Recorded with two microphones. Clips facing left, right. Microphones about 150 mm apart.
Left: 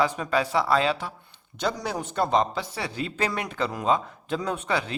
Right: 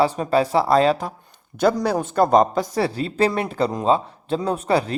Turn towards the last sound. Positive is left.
turn(degrees=-35)  # may be behind; listen again after turning